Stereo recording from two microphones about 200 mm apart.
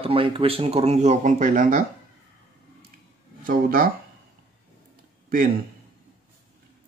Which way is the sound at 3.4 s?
45° right (ahead or behind).